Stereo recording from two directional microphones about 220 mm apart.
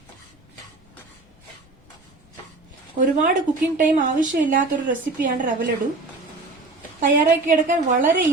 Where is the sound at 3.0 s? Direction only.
35° right (ahead or behind).